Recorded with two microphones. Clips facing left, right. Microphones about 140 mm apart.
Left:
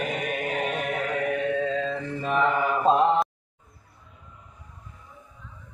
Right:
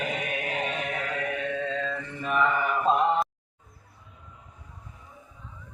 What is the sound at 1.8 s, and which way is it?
Mantra, 30° left (ahead or behind).